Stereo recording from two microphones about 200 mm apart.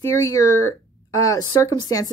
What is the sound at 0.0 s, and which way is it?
A woman's voice, 15° left (ahead or behind).